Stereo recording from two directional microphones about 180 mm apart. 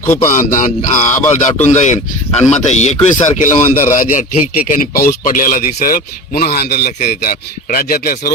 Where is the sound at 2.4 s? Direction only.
40° left (ahead or behind).